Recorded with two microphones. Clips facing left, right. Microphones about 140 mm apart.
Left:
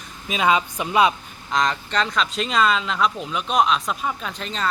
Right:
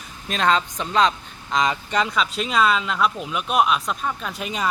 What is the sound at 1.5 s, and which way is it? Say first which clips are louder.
Speech: right 1 dB; 5° right (ahead or behind).